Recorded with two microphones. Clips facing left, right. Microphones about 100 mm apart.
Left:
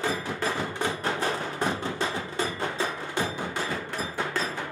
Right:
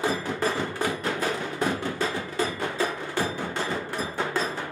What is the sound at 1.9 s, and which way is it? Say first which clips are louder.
Music: right 2 dB; 20° left (ahead or behind).